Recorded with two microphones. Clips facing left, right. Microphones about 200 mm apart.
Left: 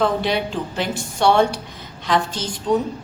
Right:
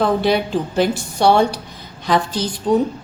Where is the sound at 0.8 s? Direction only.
35° right (ahead or behind).